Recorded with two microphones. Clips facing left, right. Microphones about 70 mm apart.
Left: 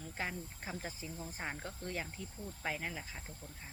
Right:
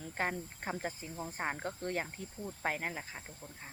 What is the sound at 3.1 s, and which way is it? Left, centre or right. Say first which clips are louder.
Speech: right 2 dB; right.